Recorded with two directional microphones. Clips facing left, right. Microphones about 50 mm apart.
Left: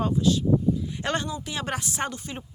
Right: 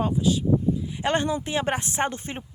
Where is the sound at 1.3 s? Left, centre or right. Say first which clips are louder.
Right 5 dB; right.